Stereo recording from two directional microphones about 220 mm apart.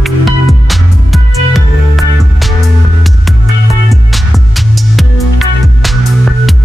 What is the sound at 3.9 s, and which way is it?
Music, centre (ahead or behind).